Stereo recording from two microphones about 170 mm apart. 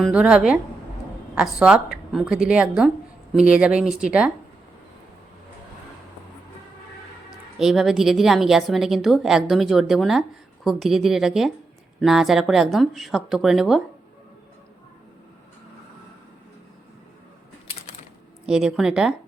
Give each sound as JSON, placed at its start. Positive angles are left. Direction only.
{"t": 0.0, "sound": "a woman's voice", "side_deg": -5}
{"t": 7.6, "sound": "a woman's voice", "side_deg": 0}
{"t": 18.4, "sound": "a woman's voice", "side_deg": -5}